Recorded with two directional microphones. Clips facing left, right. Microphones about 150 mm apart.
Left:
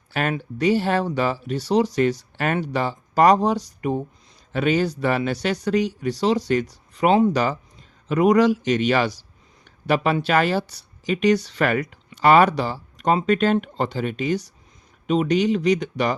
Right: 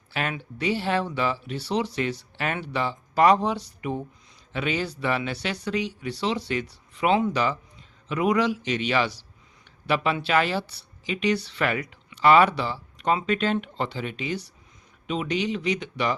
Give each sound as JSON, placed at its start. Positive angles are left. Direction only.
{"t": 0.1, "sound": "speech", "side_deg": 45}